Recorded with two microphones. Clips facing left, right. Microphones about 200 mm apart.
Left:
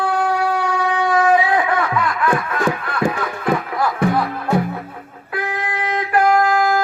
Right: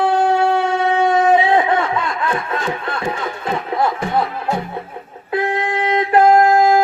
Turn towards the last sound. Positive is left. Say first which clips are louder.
# right 4 dB
turn(degrees=-25)  # may be behind; listen again after turning